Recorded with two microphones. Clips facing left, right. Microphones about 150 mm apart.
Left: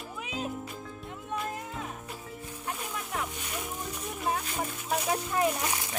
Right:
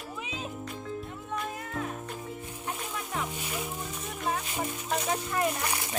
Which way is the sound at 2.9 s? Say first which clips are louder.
Right 1 dB; centre (ahead or behind).